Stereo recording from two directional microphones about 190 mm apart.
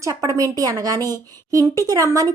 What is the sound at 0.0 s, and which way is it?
A woman's voice, 15° right (ahead or behind).